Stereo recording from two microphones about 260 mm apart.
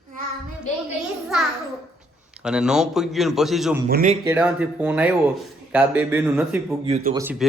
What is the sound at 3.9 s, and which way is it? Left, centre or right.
Speech, right.